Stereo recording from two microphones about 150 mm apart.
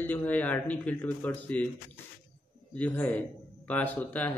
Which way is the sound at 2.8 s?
10° left (ahead or behind).